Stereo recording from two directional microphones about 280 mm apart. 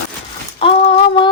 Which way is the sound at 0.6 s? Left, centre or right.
Left.